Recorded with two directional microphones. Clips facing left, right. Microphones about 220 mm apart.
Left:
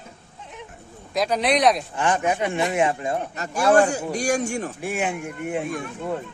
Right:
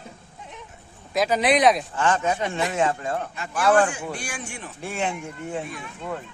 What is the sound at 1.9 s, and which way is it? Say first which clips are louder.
A man's voice: left 1 dB; 15° left (ahead or behind).